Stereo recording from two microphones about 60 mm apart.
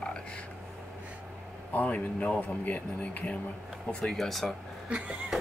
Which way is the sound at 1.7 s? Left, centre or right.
Left.